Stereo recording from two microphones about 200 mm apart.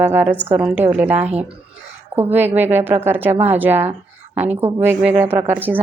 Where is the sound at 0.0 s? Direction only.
10° right (ahead or behind).